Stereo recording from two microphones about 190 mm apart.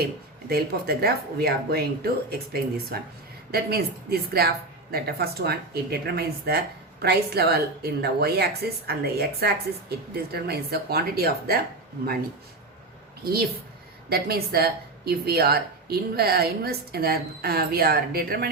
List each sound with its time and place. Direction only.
0.0 s a woman's voice: 55° right (ahead or behind)
14.1 s a woman's voice: 55° right (ahead or behind)